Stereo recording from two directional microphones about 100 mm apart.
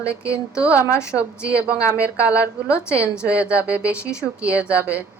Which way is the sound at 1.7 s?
15° right (ahead or behind).